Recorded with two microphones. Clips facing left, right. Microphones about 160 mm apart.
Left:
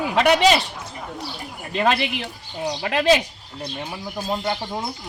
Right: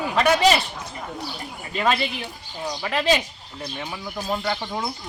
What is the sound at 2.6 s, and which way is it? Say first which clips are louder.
Speech: left 4 dB; 30° left (ahead or behind).